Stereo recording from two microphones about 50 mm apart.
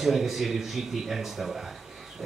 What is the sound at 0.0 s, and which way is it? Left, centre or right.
Speech, centre.